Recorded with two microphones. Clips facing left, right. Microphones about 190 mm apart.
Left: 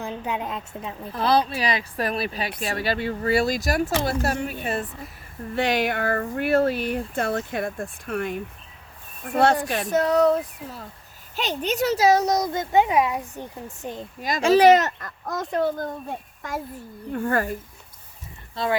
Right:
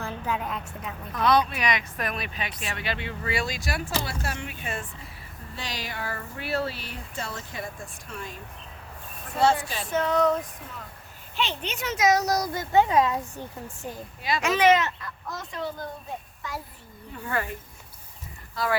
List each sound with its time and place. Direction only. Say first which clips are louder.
0.0 s a woman's voice: left 2 dB; 20° left (ahead or behind); by 4.9 s 40° left (ahead or behind)
5.5 s speech: left 13 dB; 60° left (ahead or behind)
9.9 s a woman's voice: left 4 dB; 40° left (ahead or behind); by 14.0 s 20° left (ahead or behind)
14.2 s speech: left 7 dB; 45° left (ahead or behind)
18.5 s speech: left 2 dB; 25° left (ahead or behind)